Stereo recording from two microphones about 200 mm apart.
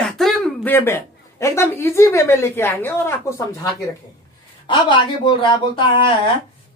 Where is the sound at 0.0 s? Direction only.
Centre (ahead or behind).